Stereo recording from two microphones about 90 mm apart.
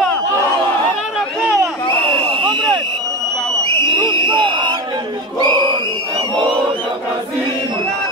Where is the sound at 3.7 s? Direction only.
60° right (ahead or behind).